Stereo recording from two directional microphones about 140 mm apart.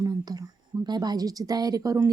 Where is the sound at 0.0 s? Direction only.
25° right (ahead or behind).